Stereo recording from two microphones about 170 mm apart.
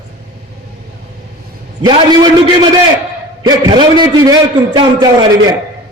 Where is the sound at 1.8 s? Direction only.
25° right (ahead or behind).